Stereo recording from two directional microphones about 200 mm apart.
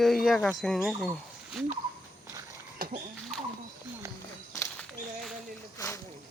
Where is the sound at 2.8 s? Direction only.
45° right (ahead or behind).